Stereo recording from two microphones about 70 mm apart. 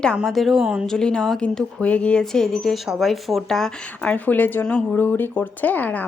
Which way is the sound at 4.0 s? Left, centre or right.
Left.